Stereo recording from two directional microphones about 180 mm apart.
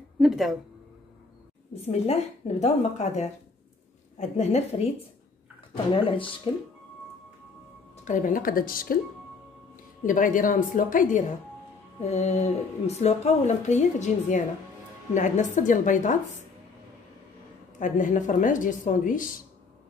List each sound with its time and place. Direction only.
0.2 s speech: centre (ahead or behind)
1.8 s speech: 35° left (ahead or behind)
5.9 s speech: 30° left (ahead or behind)
7.9 s a woman's voice: 45° left (ahead or behind)
10.0 s a woman's voice: 45° left (ahead or behind)
17.7 s a woman's voice: 45° left (ahead or behind)